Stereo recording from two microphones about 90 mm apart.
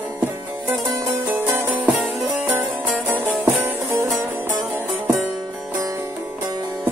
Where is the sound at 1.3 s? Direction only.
25° right (ahead or behind).